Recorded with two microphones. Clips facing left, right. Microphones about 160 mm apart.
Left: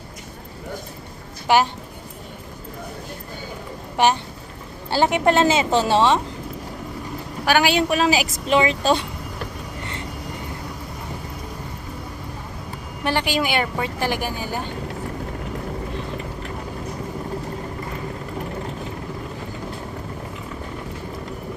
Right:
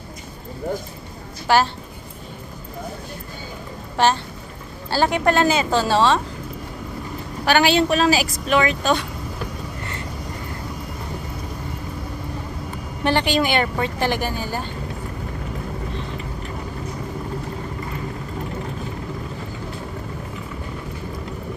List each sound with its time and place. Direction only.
1.5 s a woman's voice: 20° left (ahead or behind)
3.9 s a woman's voice: 15° left (ahead or behind)
7.4 s a woman's voice: 10° left (ahead or behind); by 9.0 s 30° left (ahead or behind)
13.1 s a woman's voice: 10° left (ahead or behind)